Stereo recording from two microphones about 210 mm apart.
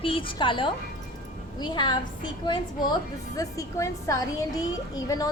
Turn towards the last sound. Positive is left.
turn(degrees=15)  # may be behind; listen again after turning